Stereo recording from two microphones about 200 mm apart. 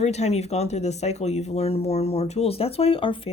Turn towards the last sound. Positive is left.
turn(degrees=25)  # may be behind; listen again after turning